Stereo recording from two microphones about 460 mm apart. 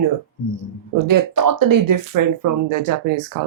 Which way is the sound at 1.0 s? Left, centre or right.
Right.